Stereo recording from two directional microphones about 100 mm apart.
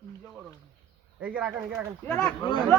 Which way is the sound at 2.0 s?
15° left (ahead or behind).